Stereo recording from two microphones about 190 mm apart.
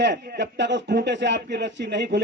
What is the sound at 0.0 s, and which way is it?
Speech, 65° right (ahead or behind).